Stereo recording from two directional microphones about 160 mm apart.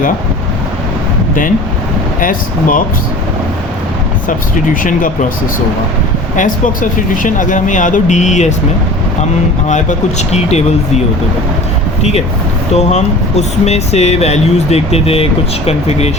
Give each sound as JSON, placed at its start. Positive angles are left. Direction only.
{"t": 2.2, "sound": "speech", "side_deg": 55}
{"t": 4.7, "sound": "speech", "side_deg": 55}
{"t": 7.2, "sound": "speech", "side_deg": 55}
{"t": 9.6, "sound": "speech", "side_deg": 45}
{"t": 12.7, "sound": "speech", "side_deg": 45}